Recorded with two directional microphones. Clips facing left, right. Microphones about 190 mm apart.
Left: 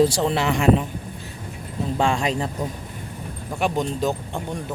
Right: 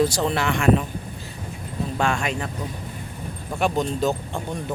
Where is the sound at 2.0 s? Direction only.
30° left (ahead or behind).